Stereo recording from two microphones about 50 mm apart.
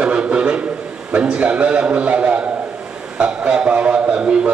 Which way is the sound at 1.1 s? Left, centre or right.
Right.